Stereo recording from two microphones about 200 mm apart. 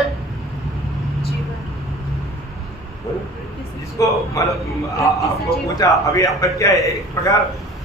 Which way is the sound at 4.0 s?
15° left (ahead or behind).